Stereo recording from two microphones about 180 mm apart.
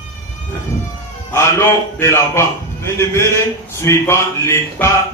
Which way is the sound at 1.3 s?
15° left (ahead or behind).